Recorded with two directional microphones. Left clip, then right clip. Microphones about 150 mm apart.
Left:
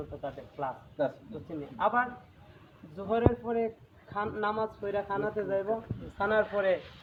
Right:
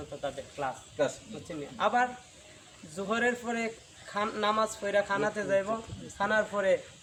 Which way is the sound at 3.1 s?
30° right (ahead or behind).